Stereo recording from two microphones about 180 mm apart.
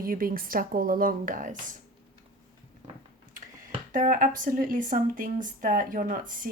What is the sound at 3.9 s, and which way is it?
Speech, 50° right (ahead or behind).